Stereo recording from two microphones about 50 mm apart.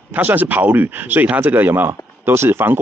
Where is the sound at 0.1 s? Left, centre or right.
Right.